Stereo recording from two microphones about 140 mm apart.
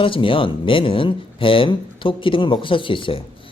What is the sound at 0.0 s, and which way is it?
Speech, 40° left (ahead or behind).